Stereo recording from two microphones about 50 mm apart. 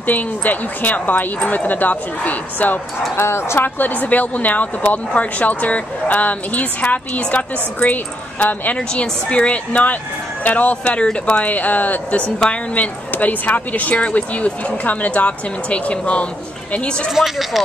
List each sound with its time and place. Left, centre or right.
0.0 s speech: left
3.2 s speech: left
3.5 s speech: left
8.7 s speech: left
11.5 s speech: left
17.1 s speech: centre